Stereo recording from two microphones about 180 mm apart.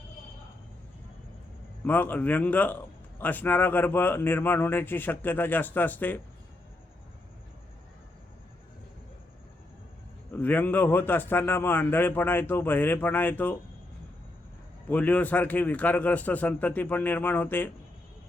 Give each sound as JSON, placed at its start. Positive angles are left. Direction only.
{"t": 1.8, "sound": "a man's voice", "side_deg": 10}
{"t": 10.3, "sound": "a man's voice", "side_deg": 10}
{"t": 14.8, "sound": "a man's voice", "side_deg": 10}